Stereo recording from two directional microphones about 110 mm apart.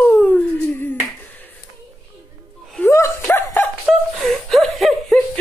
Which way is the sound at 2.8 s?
20° left (ahead or behind).